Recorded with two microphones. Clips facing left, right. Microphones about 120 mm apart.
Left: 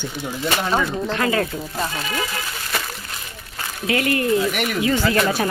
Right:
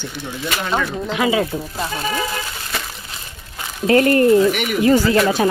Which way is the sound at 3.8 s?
40° right (ahead or behind).